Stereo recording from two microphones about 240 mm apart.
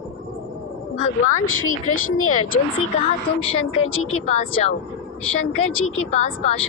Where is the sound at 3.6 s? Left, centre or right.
Left.